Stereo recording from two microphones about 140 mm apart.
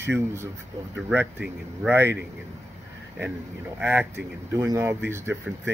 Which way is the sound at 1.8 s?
15° right (ahead or behind).